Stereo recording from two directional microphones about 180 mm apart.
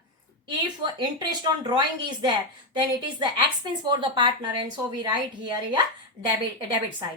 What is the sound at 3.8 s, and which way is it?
A woman's voice, 25° right (ahead or behind).